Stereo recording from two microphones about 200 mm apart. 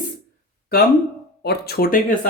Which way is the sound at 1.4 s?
50° left (ahead or behind).